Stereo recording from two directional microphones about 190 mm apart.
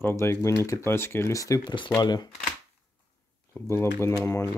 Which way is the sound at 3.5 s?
15° left (ahead or behind).